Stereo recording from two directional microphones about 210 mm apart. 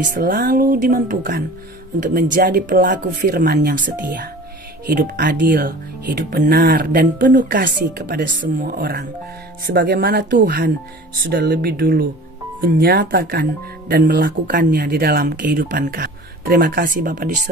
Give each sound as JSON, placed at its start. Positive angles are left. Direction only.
{"t": 0.0, "sound": "speech", "side_deg": -45}